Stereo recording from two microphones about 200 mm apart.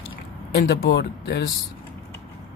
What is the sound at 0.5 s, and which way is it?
Speech, 50° left (ahead or behind).